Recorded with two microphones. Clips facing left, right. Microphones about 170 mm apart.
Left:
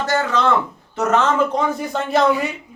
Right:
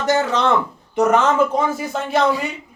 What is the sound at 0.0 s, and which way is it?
Speech, 20° right (ahead or behind).